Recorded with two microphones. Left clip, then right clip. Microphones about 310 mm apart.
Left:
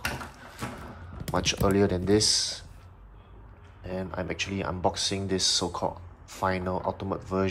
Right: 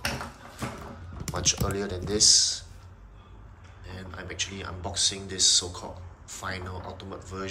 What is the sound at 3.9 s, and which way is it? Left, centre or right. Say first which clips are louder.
Speech: left 7 dB; centre.